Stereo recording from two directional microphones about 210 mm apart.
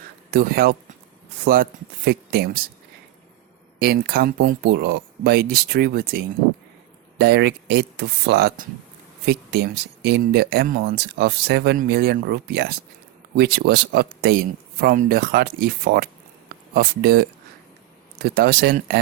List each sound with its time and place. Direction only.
0.3 s speech: 45° right (ahead or behind)
2.0 s speech: 50° right (ahead or behind)
3.8 s speech: 45° right (ahead or behind)